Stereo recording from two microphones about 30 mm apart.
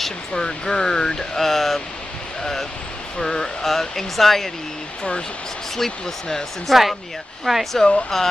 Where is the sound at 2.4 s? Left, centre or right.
Centre.